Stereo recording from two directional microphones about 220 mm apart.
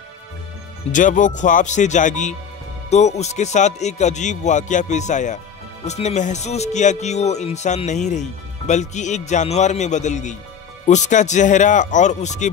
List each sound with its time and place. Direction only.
0.9 s speech: 35° left (ahead or behind)